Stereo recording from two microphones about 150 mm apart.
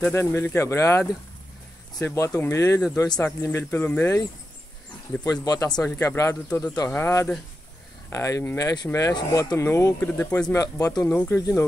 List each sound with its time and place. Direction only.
0.1 s speech: 15° left (ahead or behind)